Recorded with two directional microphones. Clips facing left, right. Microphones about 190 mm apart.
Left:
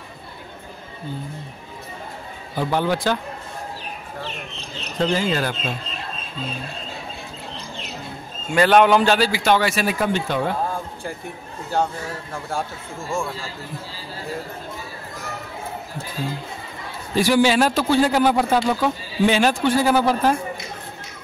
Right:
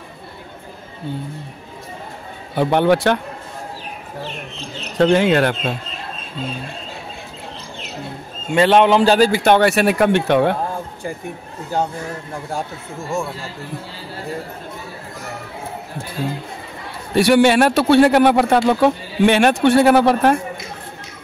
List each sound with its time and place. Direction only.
2.5 s a man's voice: 65° right (ahead or behind)
4.9 s a man's voice: 70° right (ahead or behind)
8.5 s a man's voice: 25° right (ahead or behind)
9.3 s a man's voice: 55° right (ahead or behind)
12.5 s a man's voice: 20° right (ahead or behind)
17.1 s a man's voice: 65° right (ahead or behind)